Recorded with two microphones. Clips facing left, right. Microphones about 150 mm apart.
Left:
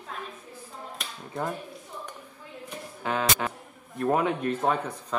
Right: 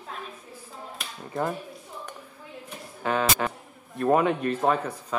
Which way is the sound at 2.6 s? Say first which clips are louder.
Right 2 dB; centre (ahead or behind).